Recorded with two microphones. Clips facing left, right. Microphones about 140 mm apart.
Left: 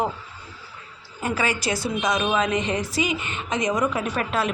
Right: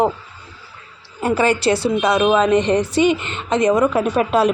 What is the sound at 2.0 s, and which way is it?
A man's voice, 65° right (ahead or behind).